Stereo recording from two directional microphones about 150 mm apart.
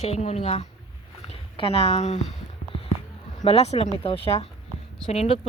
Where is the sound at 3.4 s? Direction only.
45° left (ahead or behind).